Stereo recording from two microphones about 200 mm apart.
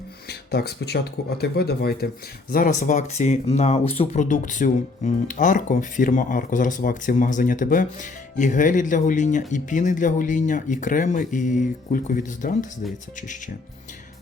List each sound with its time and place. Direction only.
0.3 s speech: 55° left (ahead or behind)